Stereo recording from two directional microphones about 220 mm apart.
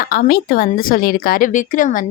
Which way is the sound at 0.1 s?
45° left (ahead or behind).